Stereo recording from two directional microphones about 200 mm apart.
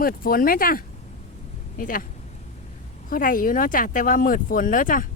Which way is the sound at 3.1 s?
45° left (ahead or behind).